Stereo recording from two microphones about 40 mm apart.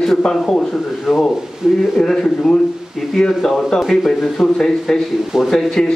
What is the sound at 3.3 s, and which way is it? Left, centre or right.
Speech, centre.